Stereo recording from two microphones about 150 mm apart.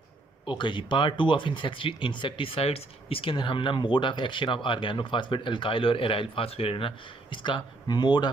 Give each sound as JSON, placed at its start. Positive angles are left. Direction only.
{"t": 0.5, "sound": "speech", "side_deg": 30}